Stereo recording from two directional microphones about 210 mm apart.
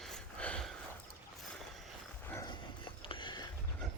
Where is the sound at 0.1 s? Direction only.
5° left (ahead or behind).